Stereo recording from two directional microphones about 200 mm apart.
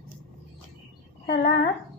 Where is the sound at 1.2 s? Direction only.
50° left (ahead or behind).